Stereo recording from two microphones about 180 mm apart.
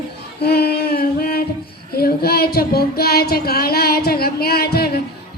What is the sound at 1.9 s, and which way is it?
Speech, 60° left (ahead or behind).